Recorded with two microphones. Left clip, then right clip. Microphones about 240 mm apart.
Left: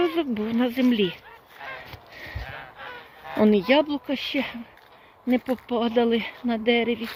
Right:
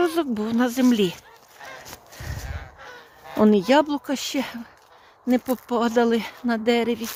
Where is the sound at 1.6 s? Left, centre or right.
Right.